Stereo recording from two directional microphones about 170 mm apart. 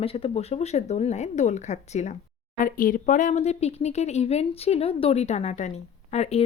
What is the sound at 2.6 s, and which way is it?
Speech, 55° left (ahead or behind).